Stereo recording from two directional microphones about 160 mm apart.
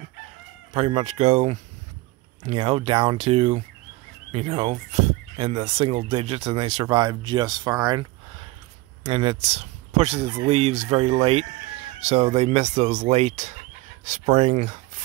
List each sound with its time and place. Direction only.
0.7 s speech: 35° right (ahead or behind)